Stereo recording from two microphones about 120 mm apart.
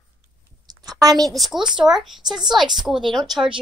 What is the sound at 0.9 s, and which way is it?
Speech, 30° right (ahead or behind).